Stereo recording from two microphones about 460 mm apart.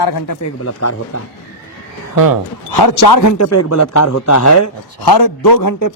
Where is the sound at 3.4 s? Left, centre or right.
Left.